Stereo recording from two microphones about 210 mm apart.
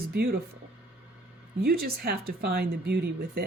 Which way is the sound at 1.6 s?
45° right (ahead or behind).